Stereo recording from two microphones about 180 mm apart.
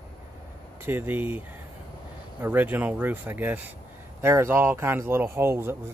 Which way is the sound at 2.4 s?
10° right (ahead or behind).